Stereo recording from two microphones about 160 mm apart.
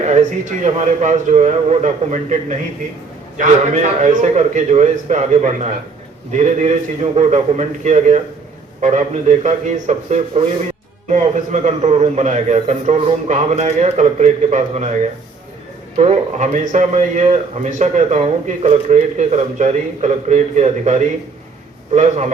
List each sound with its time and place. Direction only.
0.0 s a man's voice: 50° right (ahead or behind)
16.0 s a man's voice: 45° right (ahead or behind)